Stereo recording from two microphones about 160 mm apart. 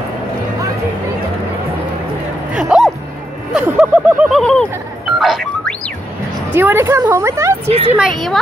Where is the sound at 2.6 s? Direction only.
5° right (ahead or behind).